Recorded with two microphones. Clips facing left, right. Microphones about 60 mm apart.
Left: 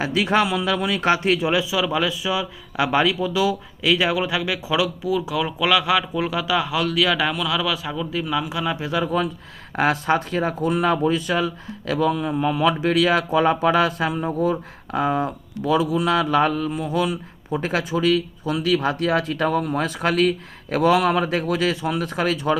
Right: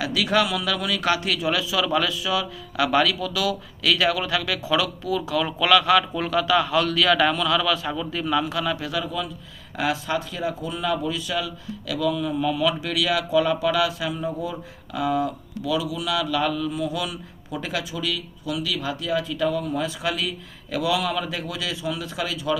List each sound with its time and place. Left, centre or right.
0.0 s a man's voice: left
9.7 s speech: left